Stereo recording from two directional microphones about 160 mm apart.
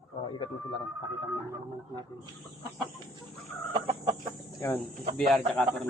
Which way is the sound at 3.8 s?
35° right (ahead or behind).